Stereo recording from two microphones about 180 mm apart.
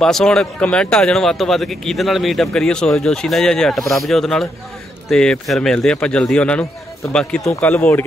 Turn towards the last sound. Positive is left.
turn(degrees=10)  # may be behind; listen again after turning